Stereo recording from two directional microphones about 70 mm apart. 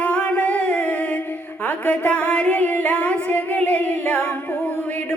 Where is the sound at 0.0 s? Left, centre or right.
Centre.